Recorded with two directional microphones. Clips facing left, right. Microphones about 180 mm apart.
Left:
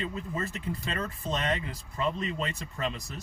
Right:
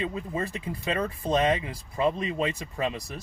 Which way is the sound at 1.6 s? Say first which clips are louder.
Right 6 dB; 15° right (ahead or behind).